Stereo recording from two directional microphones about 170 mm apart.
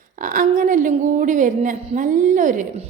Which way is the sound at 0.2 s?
50° right (ahead or behind).